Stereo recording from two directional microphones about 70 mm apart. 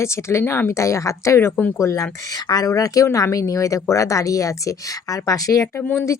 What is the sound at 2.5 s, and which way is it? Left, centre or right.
Speech, left.